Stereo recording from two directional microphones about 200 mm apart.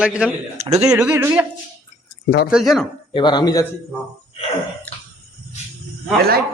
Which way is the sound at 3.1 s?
20° left (ahead or behind).